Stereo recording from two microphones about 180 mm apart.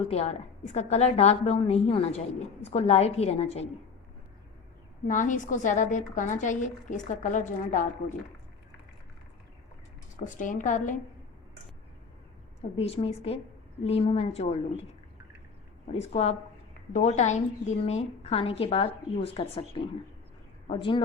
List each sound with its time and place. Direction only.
0.0 s a woman's voice: 35° left (ahead or behind)
5.0 s a woman's voice: 45° left (ahead or behind)
10.2 s a woman's voice: 45° left (ahead or behind)
12.7 s a woman's voice: 35° left (ahead or behind)
15.9 s a woman's voice: 35° left (ahead or behind)